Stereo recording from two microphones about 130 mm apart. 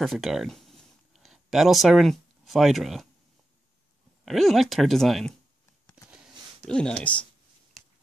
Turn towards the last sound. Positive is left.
turn(degrees=0)  # may be behind; listen again after turning